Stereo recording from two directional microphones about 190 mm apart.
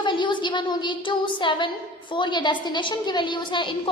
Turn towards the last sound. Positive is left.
turn(degrees=25)  # may be behind; listen again after turning